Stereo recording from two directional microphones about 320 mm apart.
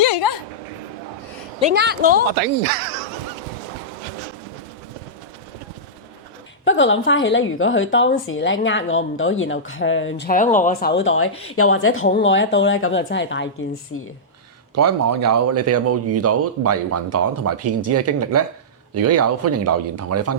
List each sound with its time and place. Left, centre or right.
0.0 s a sound: right
1.6 s a woman's voice: right
6.7 s a woman's voice: left
14.8 s speech: right